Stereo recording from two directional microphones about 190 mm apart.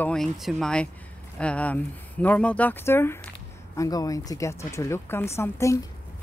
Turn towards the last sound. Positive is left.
turn(degrees=15)  # may be behind; listen again after turning